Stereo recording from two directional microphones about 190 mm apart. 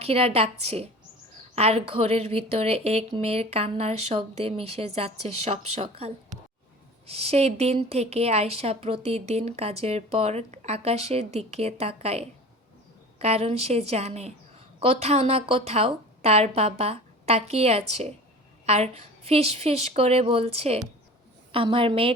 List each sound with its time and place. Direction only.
0.0 s a woman's voice: 30° right (ahead or behind)